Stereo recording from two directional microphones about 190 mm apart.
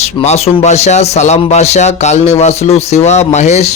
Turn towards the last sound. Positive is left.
turn(degrees=35)  # may be behind; listen again after turning